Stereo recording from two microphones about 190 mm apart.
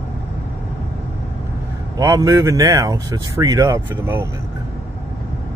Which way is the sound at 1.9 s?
20° right (ahead or behind).